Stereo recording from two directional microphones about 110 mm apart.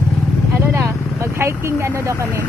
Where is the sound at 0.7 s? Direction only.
25° right (ahead or behind).